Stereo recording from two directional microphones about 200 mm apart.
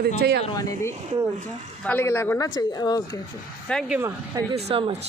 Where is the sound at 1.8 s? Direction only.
10° left (ahead or behind).